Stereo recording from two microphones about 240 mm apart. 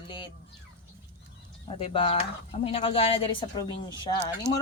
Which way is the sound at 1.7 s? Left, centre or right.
Left.